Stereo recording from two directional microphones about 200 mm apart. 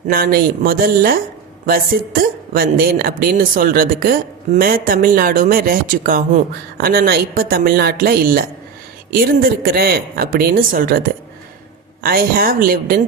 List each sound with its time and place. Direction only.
0.1 s speech: 45° right (ahead or behind)